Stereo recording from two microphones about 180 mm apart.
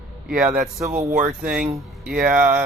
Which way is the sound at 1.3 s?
5° right (ahead or behind).